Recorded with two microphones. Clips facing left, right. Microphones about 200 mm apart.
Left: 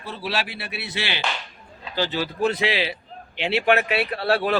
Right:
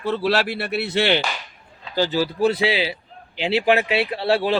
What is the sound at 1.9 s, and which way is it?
A man's voice, 45° right (ahead or behind).